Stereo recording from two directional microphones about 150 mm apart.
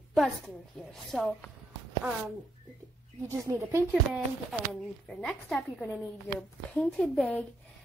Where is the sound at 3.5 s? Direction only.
20° right (ahead or behind).